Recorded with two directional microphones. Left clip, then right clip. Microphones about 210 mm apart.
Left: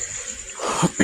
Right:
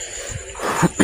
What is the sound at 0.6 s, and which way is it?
Cough, 35° right (ahead or behind).